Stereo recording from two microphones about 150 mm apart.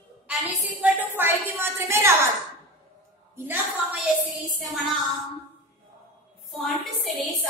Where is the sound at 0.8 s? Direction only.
10° right (ahead or behind).